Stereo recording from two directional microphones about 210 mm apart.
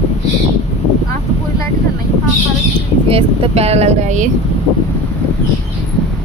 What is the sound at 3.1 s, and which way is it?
Speech, 25° right (ahead or behind).